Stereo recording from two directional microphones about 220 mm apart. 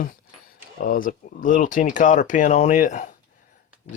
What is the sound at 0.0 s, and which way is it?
Speech, 40° left (ahead or behind).